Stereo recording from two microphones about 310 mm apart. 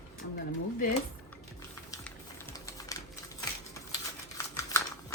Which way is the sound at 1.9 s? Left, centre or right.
Centre.